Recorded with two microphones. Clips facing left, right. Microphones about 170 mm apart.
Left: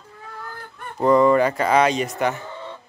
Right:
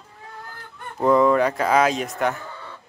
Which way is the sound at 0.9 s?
Centre (ahead or behind).